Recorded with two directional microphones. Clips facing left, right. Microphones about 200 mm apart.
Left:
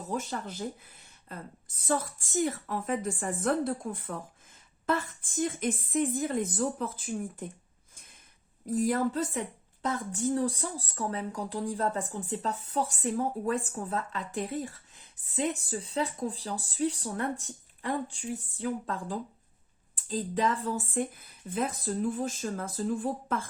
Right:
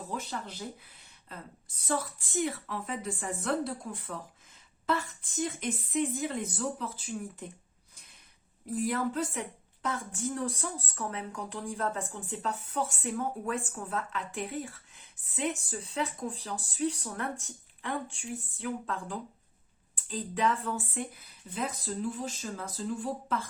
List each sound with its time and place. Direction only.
0.1 s a woman's voice: 45° left (ahead or behind)
8.6 s a woman's voice: 40° left (ahead or behind)